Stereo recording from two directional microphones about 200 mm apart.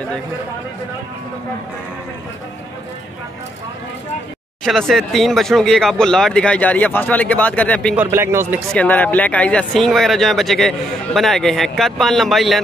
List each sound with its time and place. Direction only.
4.6 s speech: centre (ahead or behind)
7.9 s speech: 10° right (ahead or behind)
8.7 s speech: 10° left (ahead or behind)